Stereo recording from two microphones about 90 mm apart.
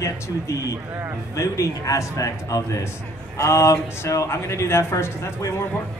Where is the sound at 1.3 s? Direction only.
35° left (ahead or behind).